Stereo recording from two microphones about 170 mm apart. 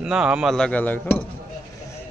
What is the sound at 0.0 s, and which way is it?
Speech, 5° right (ahead or behind).